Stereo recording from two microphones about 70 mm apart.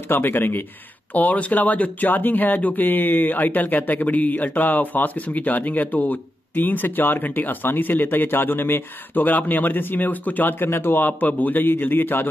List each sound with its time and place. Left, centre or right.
0.1 s speech: left